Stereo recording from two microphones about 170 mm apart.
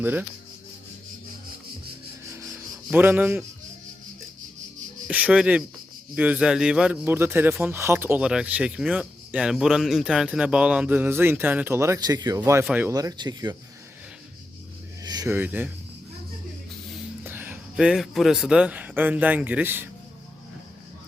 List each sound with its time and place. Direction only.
0.0 s speech: 10° right (ahead or behind)
2.3 s a sound: 15° right (ahead or behind)
5.0 s speech: 5° right (ahead or behind)
12.9 s speech: 20° right (ahead or behind)
15.0 s speech: 20° right (ahead or behind)
17.2 s speech: 10° right (ahead or behind)